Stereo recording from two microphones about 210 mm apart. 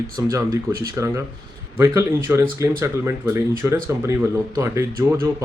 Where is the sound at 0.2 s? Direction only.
15° right (ahead or behind).